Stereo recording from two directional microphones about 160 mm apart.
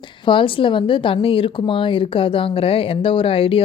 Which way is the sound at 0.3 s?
35° left (ahead or behind).